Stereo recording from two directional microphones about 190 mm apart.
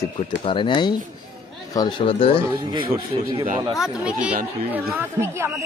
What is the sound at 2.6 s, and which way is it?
Speech, 25° right (ahead or behind).